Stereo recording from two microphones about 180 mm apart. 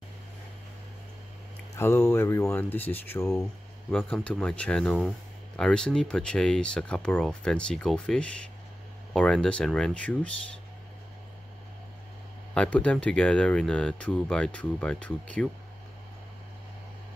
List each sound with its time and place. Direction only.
1.8 s speech: 15° left (ahead or behind)
12.5 s speech: 5° left (ahead or behind)